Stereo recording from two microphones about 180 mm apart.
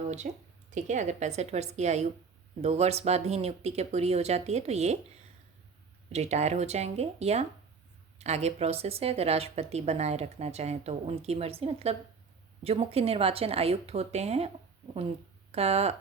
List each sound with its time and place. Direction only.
0.2 s a woman's voice: 45° right (ahead or behind)
6.1 s speech: 35° right (ahead or behind)
15.5 s speech: 35° right (ahead or behind)